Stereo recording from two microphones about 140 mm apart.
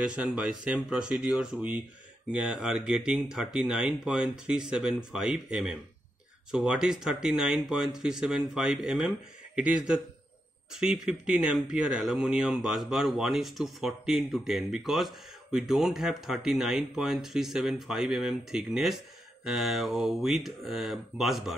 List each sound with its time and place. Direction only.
0.0 s speech: 5° right (ahead or behind)